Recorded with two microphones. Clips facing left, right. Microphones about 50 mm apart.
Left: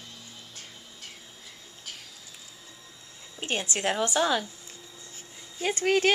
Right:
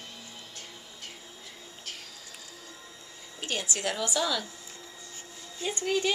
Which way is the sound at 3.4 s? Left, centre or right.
Left.